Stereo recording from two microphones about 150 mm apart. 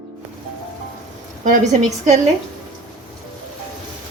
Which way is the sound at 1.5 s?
50° right (ahead or behind).